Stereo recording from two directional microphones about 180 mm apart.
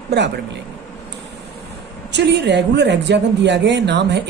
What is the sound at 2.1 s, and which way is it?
A woman's voice, 75° right (ahead or behind).